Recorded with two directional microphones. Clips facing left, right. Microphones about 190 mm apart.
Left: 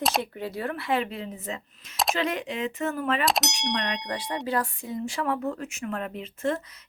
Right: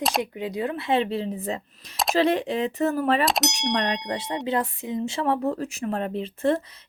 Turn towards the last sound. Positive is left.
turn(degrees=-30)  # may be behind; listen again after turning